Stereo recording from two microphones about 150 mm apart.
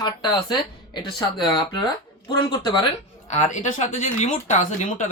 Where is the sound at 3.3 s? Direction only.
55° left (ahead or behind).